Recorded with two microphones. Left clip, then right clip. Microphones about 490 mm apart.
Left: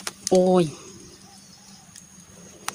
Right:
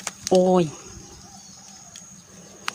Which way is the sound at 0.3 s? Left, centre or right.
Right.